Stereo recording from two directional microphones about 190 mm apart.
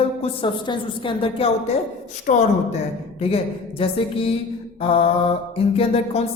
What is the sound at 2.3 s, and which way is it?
Speech, 45° left (ahead or behind).